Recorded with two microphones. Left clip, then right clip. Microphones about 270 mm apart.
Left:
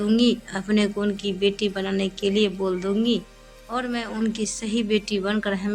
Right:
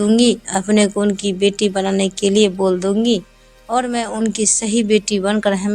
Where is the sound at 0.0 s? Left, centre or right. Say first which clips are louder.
Right 7 dB; right.